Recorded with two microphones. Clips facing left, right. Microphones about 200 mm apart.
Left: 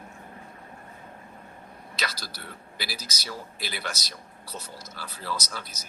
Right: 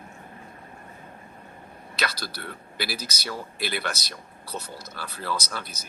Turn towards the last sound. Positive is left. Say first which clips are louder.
# right 3 dB
turn(degrees=-60)  # may be behind; listen again after turning